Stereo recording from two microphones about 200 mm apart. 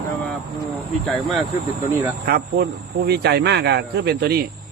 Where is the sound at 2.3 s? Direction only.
50° right (ahead or behind).